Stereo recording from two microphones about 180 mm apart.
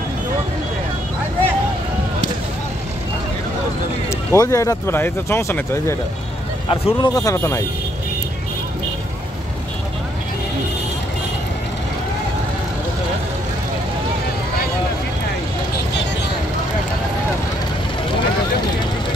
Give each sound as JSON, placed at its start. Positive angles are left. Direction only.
{"t": 4.3, "sound": "speech", "side_deg": 15}
{"t": 6.7, "sound": "speech", "side_deg": 30}